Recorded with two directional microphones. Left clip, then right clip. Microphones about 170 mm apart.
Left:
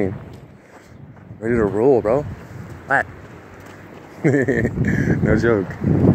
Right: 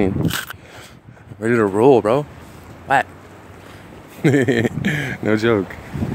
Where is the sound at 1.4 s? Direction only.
35° right (ahead or behind).